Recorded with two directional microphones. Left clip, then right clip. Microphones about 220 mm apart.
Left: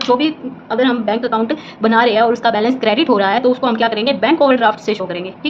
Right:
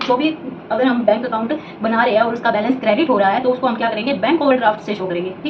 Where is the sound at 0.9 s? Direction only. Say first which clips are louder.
Even; 55° left (ahead or behind).